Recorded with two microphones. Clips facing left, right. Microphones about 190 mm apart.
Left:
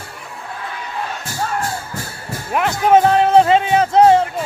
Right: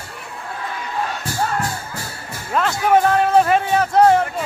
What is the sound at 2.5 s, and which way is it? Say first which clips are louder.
Music: left 3 dB; 15° left (ahead or behind).